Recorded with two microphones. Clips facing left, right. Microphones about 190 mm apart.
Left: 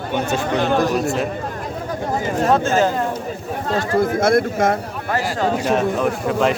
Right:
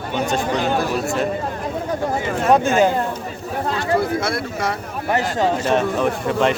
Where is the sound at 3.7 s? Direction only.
45° left (ahead or behind).